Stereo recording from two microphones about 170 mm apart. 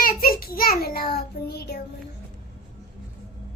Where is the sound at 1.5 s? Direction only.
70° left (ahead or behind).